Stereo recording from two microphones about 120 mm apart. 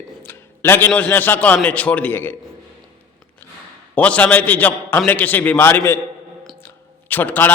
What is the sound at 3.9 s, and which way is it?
A man's voice, 10° left (ahead or behind).